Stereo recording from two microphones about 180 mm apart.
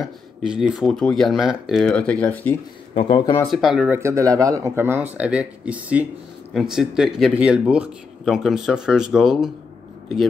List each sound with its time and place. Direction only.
0.4 s speech: 5° right (ahead or behind)
2.9 s speech: 30° left (ahead or behind)
3.4 s speech: centre (ahead or behind)